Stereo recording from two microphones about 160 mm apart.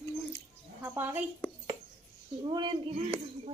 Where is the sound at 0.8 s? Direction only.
15° right (ahead or behind).